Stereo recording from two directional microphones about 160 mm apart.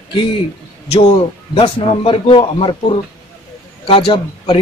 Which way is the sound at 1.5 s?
35° left (ahead or behind).